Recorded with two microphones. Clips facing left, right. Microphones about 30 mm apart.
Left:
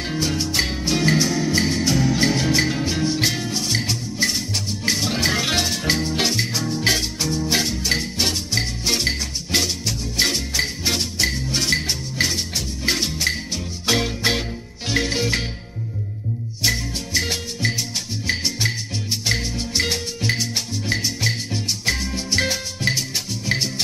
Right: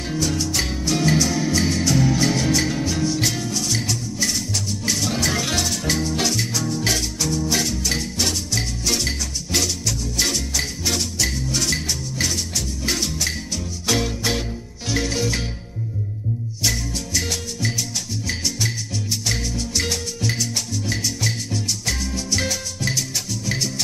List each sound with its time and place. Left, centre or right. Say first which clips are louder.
0.0 s music: even; left
16.6 s music: left 2 dB; left